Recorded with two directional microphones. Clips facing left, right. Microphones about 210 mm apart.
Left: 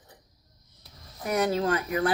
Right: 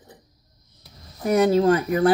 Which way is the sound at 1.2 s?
30° right (ahead or behind).